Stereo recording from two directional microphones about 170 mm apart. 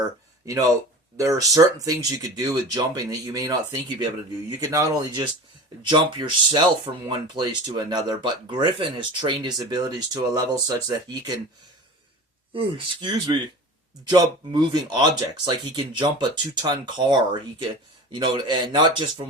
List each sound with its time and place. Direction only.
0.4 s speech: 20° right (ahead or behind)
12.5 s speech: 30° right (ahead or behind)